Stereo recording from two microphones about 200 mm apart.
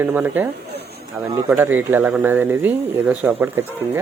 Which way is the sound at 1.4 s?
10° right (ahead or behind).